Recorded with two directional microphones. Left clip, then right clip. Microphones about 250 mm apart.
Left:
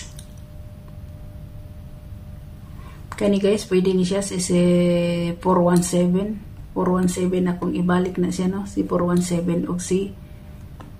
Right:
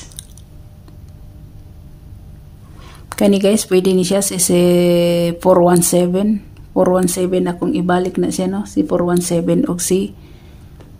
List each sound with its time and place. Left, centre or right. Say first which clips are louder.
3.1 s speech: right 6 dB; right